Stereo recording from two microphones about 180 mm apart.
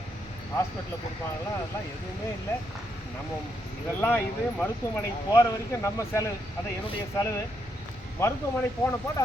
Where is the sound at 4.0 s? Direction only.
10° left (ahead or behind).